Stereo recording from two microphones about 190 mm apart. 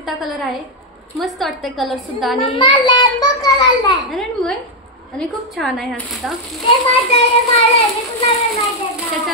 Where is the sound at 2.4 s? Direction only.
25° left (ahead or behind).